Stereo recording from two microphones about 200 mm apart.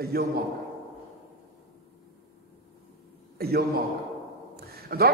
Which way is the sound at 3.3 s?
50° right (ahead or behind).